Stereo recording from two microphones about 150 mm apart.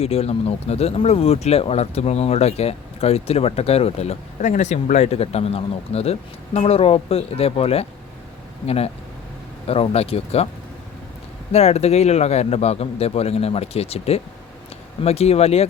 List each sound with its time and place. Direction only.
0.0 s speech: 40° left (ahead or behind)
11.5 s speech: 45° left (ahead or behind)